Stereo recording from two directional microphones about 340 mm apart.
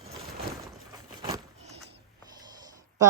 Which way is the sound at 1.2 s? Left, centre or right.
Centre.